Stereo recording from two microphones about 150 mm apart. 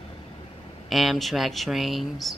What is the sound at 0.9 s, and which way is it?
Speech, centre (ahead or behind).